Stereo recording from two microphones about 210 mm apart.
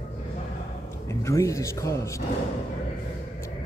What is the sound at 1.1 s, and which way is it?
Speech, 15° left (ahead or behind).